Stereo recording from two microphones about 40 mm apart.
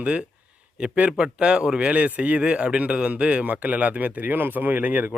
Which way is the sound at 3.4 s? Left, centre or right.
Right.